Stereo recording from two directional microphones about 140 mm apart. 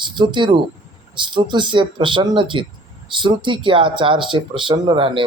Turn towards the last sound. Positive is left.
turn(degrees=-40)  # may be behind; listen again after turning